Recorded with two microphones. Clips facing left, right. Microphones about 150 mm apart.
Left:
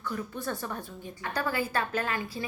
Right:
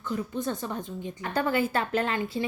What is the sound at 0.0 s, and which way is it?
A woman's voice, 20° right (ahead or behind).